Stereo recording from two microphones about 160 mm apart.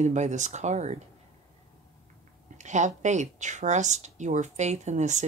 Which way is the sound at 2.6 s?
50° right (ahead or behind).